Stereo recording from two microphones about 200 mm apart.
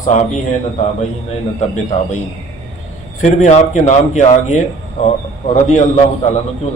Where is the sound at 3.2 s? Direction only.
35° left (ahead or behind).